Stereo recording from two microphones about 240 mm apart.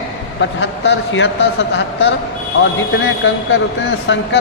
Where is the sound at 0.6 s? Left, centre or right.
Left.